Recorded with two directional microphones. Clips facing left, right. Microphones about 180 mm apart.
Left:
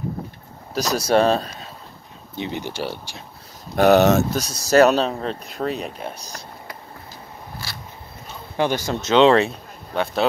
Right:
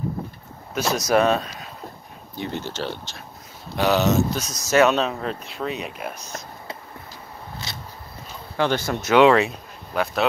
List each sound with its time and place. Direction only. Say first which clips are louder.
0.7 s speech: left 2 dB; 30° left (ahead or behind)
2.3 s speech: left 1 dB; 15° left (ahead or behind)
3.7 s speech: left 5 dB; 55° left (ahead or behind)
4.4 s speech: left 3 dB; 35° left (ahead or behind)
7.6 s a sound: right 1 dB; 20° right (ahead or behind)
8.5 s speech: left 1 dB; 15° left (ahead or behind)